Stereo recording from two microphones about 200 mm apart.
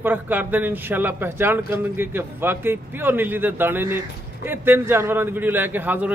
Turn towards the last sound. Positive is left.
turn(degrees=-10)  # may be behind; listen again after turning